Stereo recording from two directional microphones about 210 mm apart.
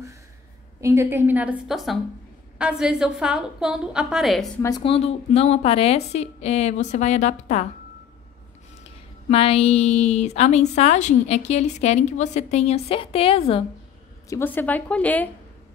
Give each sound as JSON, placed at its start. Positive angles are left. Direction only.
{"t": 0.7, "sound": "a woman's voice", "side_deg": -15}
{"t": 4.6, "sound": "a woman's voice", "side_deg": 15}
{"t": 9.3, "sound": "a woman's voice", "side_deg": 30}
{"t": 14.3, "sound": "a woman's voice", "side_deg": 10}